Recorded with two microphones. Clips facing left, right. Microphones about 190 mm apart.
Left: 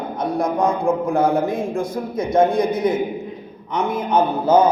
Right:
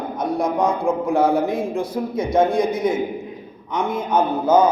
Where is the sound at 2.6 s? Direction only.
60° left (ahead or behind).